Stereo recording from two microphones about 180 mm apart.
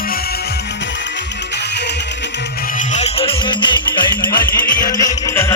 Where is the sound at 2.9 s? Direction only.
35° left (ahead or behind).